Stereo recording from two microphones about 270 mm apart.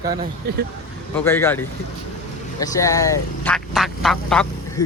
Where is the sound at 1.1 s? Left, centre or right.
Centre.